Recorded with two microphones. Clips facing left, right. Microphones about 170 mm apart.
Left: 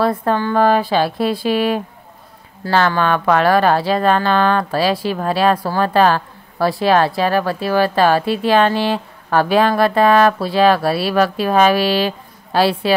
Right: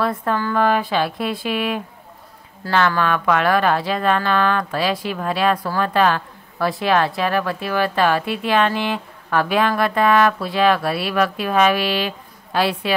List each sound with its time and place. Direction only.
0.0 s a woman's voice: 30° left (ahead or behind)